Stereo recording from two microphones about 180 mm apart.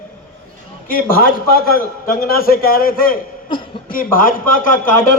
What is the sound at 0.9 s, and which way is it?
A man's voice, 50° left (ahead or behind).